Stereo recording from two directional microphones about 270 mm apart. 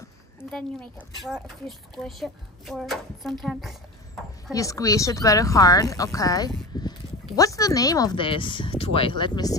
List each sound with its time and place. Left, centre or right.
0.4 s speech: centre